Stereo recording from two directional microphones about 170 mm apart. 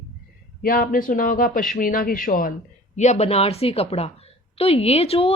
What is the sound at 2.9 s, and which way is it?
A woman's voice, 45° left (ahead or behind).